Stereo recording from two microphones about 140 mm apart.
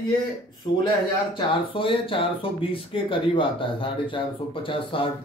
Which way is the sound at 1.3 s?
40° left (ahead or behind).